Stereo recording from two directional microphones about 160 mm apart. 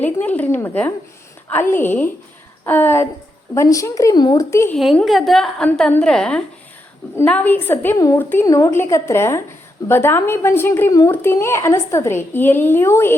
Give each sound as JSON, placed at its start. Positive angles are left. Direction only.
{"t": 0.0, "sound": "speech", "side_deg": 10}
{"t": 4.7, "sound": "a woman's voice", "side_deg": 5}